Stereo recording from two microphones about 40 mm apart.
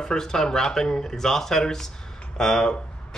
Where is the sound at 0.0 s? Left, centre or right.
Centre.